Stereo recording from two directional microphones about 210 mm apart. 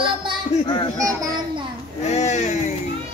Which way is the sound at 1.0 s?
15° right (ahead or behind).